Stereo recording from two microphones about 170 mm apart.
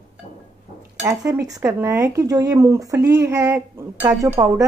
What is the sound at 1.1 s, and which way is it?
Speech, 20° right (ahead or behind).